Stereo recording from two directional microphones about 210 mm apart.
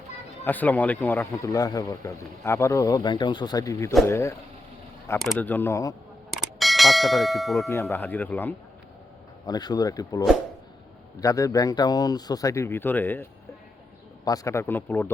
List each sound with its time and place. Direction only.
0.4 s speech: 10° left (ahead or behind)
6.3 s a sound: centre (ahead or behind)
7.7 s speech: 10° left (ahead or behind)
9.5 s speech: 20° left (ahead or behind)
14.3 s speech: 15° left (ahead or behind)